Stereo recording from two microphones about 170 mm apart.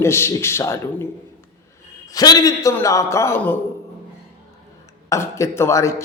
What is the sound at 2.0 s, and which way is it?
A man's voice, 20° left (ahead or behind).